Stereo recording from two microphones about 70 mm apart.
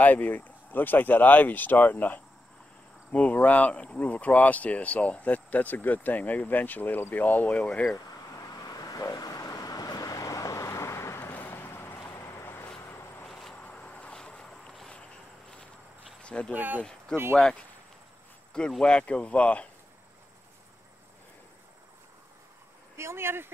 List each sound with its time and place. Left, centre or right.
0.0 s speech: left
8.4 s vehicle: left
13.3 s a sound: centre
13.6 s vehicle: centre
16.2 s a sound: centre
16.5 s speech: right
18.7 s speech: centre
22.9 s speech: right